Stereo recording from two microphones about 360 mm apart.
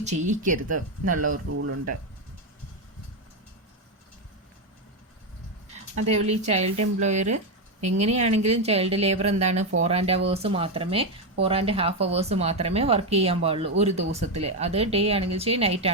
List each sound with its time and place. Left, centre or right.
0.0 s speech: centre
1.5 s speech: right
6.1 s speech: centre